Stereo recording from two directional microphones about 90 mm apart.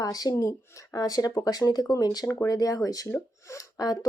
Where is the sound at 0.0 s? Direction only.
45° left (ahead or behind).